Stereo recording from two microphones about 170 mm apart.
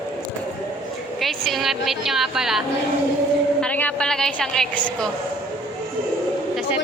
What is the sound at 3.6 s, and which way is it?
A woman's voice, 10° left (ahead or behind).